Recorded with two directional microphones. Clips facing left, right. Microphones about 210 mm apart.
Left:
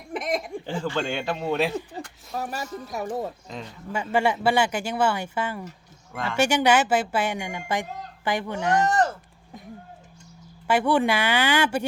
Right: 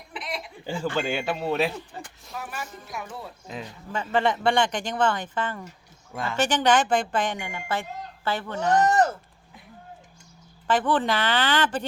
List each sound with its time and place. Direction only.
0.1 s chuckle: 45° left (ahead or behind)
0.6 s speech: 10° right (ahead or behind)
2.3 s speech: 40° left (ahead or behind)
3.9 s speech: 10° left (ahead or behind)
10.7 s speech: 10° left (ahead or behind)